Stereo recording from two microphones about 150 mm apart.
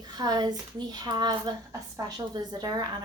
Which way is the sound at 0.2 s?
25° right (ahead or behind).